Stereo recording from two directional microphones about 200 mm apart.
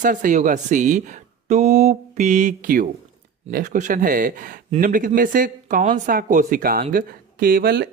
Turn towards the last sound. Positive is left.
turn(degrees=-50)  # may be behind; listen again after turning